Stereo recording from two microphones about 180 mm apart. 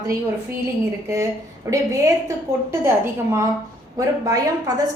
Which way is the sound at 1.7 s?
15° right (ahead or behind).